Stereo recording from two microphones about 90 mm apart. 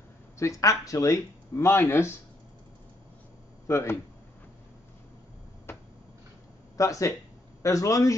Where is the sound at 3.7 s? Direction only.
30° left (ahead or behind).